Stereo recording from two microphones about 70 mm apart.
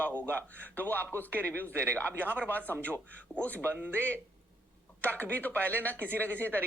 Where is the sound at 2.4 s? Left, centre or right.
Left.